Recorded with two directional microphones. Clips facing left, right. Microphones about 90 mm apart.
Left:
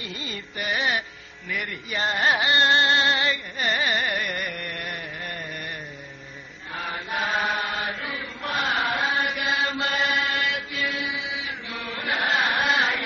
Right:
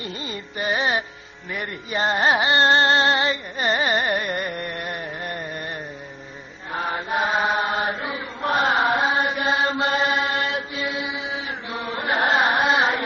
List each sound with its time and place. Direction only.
0.0 s music: 35° right (ahead or behind)
2.3 s carnatic music: 30° right (ahead or behind)
6.7 s chant: 35° right (ahead or behind)